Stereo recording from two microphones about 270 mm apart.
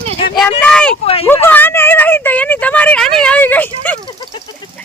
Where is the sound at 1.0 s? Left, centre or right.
Left.